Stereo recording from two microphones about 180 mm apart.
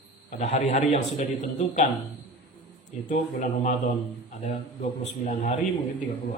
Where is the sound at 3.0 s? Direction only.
40° left (ahead or behind).